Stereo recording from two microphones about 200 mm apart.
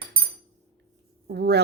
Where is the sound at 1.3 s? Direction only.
55° right (ahead or behind).